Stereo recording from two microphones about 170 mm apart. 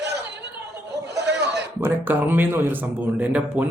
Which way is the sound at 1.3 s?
85° right.